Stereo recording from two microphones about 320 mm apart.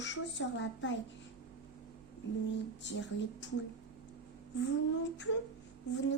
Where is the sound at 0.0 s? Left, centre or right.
Left.